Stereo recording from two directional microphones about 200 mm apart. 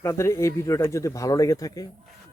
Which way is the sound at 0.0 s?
15° left (ahead or behind).